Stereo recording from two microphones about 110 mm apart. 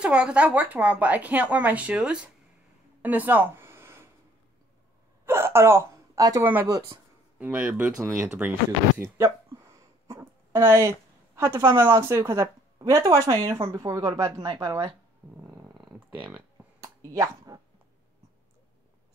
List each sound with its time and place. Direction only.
0.0 s speech: 10° right (ahead or behind)
3.0 s a sound: 15° right (ahead or behind)
5.2 s hiccup: 25° right (ahead or behind)
6.4 s speech: 20° right (ahead or behind)
8.0 s speech: 25° right (ahead or behind)
16.1 s speech: 15° right (ahead or behind)
16.8 s a sound: 30° right (ahead or behind)